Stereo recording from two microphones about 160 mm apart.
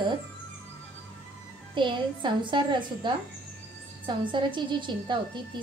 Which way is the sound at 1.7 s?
30° right (ahead or behind).